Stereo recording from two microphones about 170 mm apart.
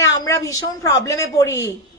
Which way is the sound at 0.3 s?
20° left (ahead or behind).